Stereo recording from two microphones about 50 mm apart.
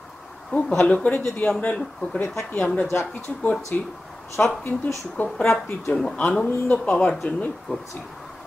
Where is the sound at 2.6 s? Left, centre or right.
Centre.